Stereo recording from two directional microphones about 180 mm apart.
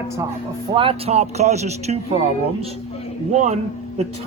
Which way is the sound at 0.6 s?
30° right (ahead or behind).